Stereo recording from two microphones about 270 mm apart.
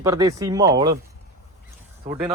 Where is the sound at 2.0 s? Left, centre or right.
Centre.